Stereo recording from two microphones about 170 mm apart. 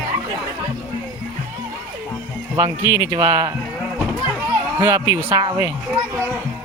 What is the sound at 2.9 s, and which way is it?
Speech, 20° right (ahead or behind).